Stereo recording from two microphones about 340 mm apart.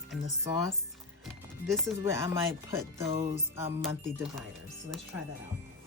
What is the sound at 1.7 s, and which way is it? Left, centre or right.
A woman's voice, centre.